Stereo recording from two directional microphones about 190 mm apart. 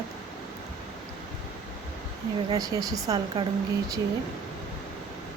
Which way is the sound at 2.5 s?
20° right (ahead or behind).